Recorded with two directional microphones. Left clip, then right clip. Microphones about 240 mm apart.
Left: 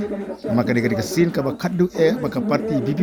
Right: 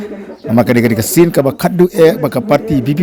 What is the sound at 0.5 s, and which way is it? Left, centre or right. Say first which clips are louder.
Speech: right 9 dB; right.